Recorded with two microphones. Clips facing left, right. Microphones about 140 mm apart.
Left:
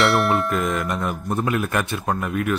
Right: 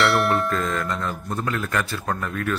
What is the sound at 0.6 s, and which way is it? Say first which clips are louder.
Speech: left 2 dB; 15° left (ahead or behind).